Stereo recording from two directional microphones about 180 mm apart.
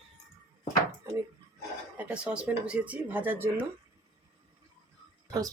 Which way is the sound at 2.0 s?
5° right (ahead or behind).